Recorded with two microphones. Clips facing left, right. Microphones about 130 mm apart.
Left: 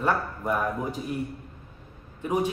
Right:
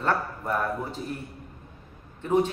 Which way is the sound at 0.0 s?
10° left (ahead or behind).